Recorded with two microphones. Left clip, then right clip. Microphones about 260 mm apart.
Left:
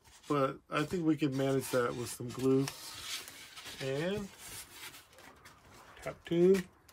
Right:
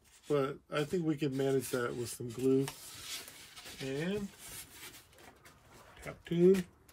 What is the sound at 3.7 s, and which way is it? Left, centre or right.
Speech, centre.